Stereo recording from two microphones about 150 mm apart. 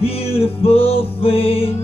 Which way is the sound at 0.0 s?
40° left (ahead or behind).